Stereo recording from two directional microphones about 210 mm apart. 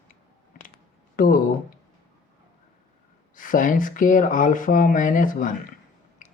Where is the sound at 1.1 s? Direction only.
40° left (ahead or behind).